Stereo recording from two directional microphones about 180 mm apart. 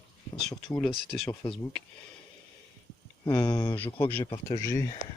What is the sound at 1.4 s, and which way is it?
Speech, 30° left (ahead or behind).